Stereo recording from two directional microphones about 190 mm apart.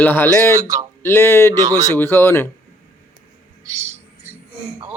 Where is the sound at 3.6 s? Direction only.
15° right (ahead or behind).